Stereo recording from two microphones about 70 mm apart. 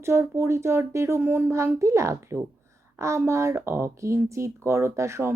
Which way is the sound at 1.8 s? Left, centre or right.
Right.